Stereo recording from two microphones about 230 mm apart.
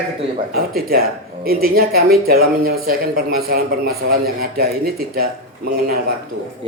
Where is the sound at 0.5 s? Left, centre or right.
Right.